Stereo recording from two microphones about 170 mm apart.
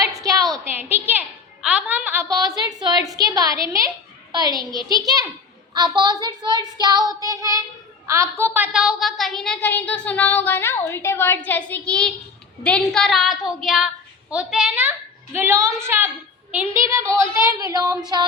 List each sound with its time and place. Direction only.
0.3 s a sound: 20° right (ahead or behind)
1.6 s a woman's voice: 5° right (ahead or behind)
2.3 s child singing: 20° right (ahead or behind)
8.1 s a woman's voice: 15° right (ahead or behind)
17.5 s child singing: 20° right (ahead or behind)